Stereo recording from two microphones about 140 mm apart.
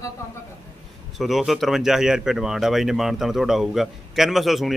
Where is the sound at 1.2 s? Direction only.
Centre (ahead or behind).